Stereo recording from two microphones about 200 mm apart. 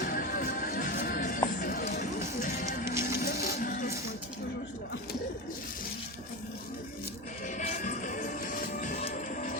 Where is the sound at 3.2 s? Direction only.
50° left (ahead or behind).